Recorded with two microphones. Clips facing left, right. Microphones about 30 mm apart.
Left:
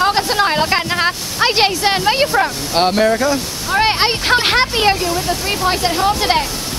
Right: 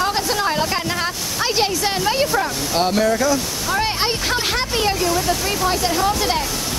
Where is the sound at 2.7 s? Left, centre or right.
Left.